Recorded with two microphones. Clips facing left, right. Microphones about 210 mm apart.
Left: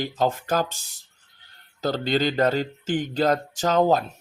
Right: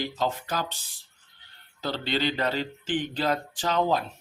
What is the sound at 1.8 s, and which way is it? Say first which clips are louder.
Speech: left 5 dB; 45° left (ahead or behind).